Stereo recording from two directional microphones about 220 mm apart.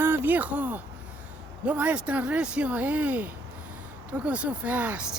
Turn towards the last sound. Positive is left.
turn(degrees=-5)  # may be behind; listen again after turning